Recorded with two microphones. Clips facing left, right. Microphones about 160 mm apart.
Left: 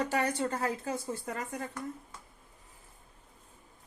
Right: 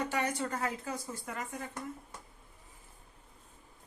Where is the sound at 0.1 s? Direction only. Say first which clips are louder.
Left 3 dB; 30° left (ahead or behind).